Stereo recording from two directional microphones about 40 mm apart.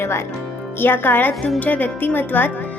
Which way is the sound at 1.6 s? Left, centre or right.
Left.